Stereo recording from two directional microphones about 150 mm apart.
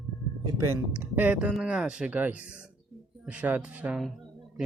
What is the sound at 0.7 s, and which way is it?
Speech, 10° right (ahead or behind).